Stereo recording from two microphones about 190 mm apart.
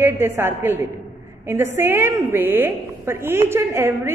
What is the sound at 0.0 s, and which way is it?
A woman's voice, 10° right (ahead or behind).